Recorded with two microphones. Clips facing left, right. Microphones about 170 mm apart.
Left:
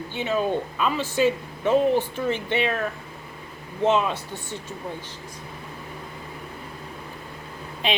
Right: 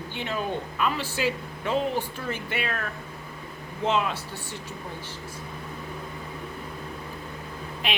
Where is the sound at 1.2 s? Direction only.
20° left (ahead or behind).